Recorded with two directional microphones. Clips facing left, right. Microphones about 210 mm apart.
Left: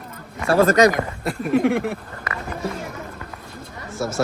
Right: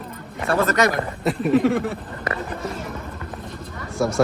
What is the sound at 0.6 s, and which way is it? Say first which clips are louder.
Speech: left 6 dB; 45° left (ahead or behind).